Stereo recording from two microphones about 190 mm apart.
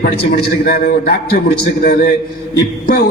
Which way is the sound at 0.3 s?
55° left (ahead or behind).